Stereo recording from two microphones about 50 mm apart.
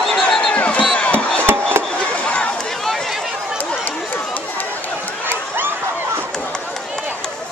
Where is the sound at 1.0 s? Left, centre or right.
Left.